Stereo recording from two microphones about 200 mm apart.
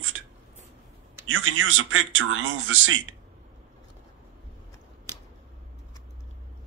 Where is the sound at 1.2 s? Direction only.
75° right (ahead or behind).